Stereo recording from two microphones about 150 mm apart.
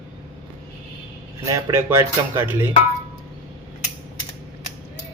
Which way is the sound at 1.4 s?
20° right (ahead or behind).